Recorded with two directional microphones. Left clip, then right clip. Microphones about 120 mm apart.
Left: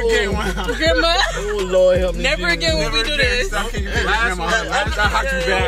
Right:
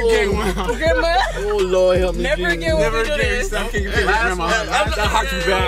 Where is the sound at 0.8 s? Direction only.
20° left (ahead or behind).